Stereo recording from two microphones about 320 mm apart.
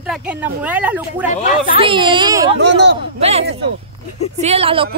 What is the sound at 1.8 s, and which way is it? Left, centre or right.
Speech, centre.